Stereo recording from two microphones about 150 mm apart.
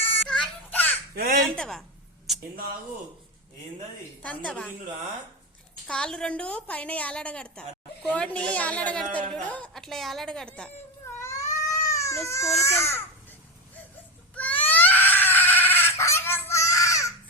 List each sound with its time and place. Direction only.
0.0 s a sound: 10° left (ahead or behind)
1.1 s speech: 90° right
1.5 s a woman's voice: 5° left (ahead or behind)
2.3 s a sound: centre (ahead or behind)
4.2 s a woman's voice: 10° left (ahead or behind)
5.9 s a woman's voice: 5° left (ahead or behind)
11.2 s cat: 20° left (ahead or behind)
11.9 s speech: 20° left (ahead or behind)
14.3 s baby cry: 10° left (ahead or behind)